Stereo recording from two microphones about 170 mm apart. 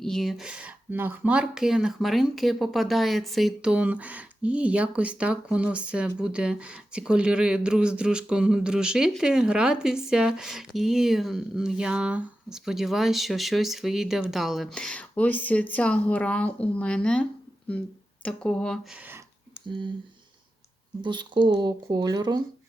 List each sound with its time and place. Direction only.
0.0 s speech: centre (ahead or behind)
19.6 s speech: 30° right (ahead or behind)
21.0 s speech: 25° right (ahead or behind)